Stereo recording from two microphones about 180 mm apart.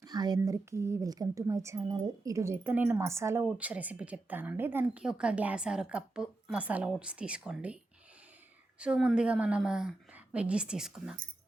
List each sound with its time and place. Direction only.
0.0 s speech: 20° right (ahead or behind); by 7.8 s 5° right (ahead or behind)
8.8 s a woman's voice: 5° right (ahead or behind)